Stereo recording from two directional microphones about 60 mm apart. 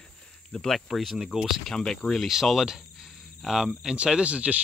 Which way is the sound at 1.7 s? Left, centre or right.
Centre.